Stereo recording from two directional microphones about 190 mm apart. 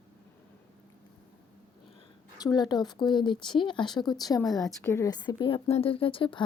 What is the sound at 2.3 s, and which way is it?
Speech, 20° left (ahead or behind).